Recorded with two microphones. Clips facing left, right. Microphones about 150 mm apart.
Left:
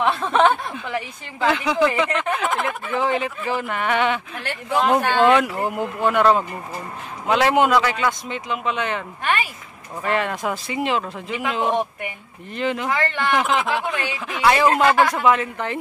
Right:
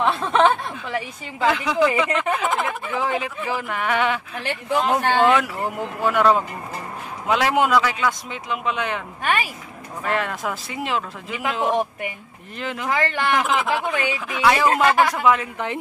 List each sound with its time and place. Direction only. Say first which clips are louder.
0.0 s speech: even; 5° left (ahead or behind)
10.0 s speech: left 2 dB; centre (ahead or behind)